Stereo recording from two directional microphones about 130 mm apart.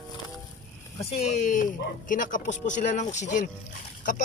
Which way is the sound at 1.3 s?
70° left (ahead or behind).